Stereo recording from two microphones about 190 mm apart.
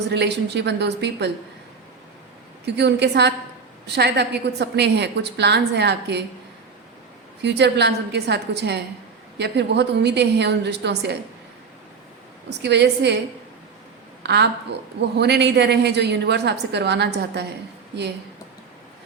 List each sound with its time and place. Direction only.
0.1 s a woman's voice: 65° right (ahead or behind)
2.6 s a woman's voice: 65° right (ahead or behind)
7.4 s a woman's voice: 65° right (ahead or behind)
12.5 s a woman's voice: 65° right (ahead or behind)
14.3 s a woman's voice: 65° right (ahead or behind)